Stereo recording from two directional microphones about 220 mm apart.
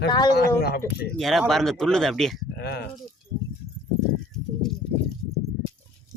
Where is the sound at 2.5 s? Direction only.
50° left (ahead or behind).